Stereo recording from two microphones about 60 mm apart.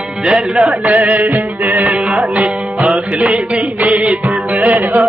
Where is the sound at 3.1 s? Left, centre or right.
Centre.